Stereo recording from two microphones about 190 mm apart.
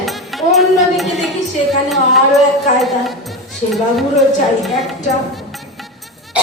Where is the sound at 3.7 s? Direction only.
Centre (ahead or behind).